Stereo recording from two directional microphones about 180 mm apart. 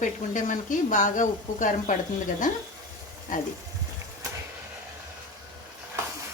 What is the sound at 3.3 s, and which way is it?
Speech, 45° left (ahead or behind).